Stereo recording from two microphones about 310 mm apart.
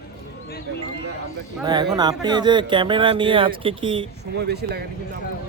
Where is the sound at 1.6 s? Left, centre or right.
Centre.